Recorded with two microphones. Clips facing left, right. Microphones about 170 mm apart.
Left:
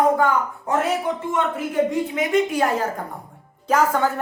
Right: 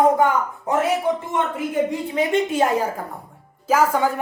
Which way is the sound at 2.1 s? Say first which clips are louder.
Even; 30° right (ahead or behind).